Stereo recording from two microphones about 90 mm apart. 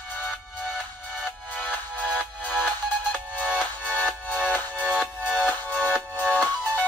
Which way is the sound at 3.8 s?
20° left (ahead or behind).